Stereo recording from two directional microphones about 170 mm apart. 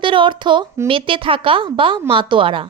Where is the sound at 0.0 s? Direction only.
30° right (ahead or behind).